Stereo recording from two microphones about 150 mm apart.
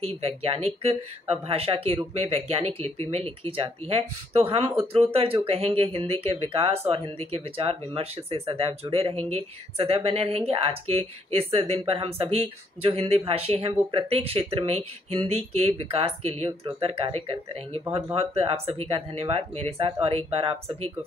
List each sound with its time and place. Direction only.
0.0 s speech: 40° right (ahead or behind)